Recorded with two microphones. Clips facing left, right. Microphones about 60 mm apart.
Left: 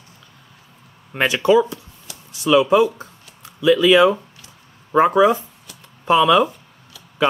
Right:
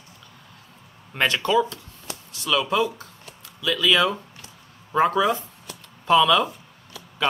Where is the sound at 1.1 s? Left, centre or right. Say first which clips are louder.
Left 5 dB; centre.